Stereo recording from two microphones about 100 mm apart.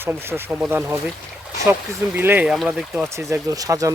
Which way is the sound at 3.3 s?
35° right (ahead or behind).